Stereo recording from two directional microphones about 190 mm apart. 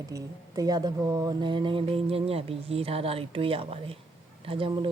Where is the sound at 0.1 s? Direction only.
20° right (ahead or behind).